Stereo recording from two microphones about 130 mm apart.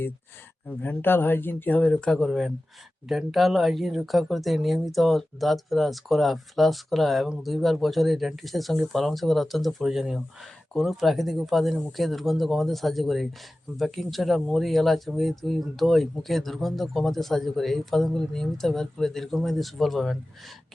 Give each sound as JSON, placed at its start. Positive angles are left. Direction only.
{"t": 0.7, "sound": "speech", "side_deg": 15}